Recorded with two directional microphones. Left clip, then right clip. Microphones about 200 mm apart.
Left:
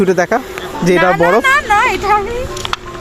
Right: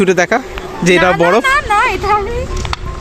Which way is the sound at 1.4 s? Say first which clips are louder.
Left 1 dB; 20° left (ahead or behind).